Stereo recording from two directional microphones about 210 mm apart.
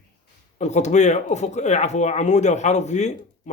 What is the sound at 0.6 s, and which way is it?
Speech, 35° left (ahead or behind).